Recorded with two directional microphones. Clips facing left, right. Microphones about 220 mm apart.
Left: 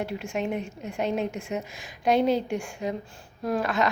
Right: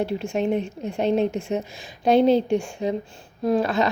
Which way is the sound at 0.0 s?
30° right (ahead or behind).